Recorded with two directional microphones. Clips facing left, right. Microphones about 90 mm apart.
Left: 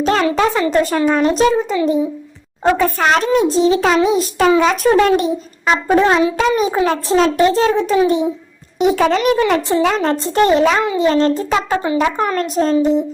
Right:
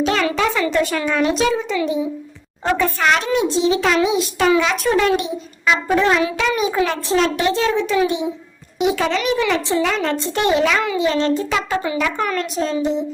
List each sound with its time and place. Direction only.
0.0 s a child's voice: 35° left (ahead or behind)